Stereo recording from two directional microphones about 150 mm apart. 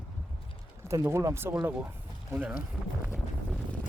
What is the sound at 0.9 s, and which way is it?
Speech, 20° right (ahead or behind).